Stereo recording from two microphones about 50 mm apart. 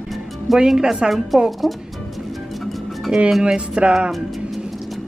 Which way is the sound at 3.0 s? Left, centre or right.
Centre.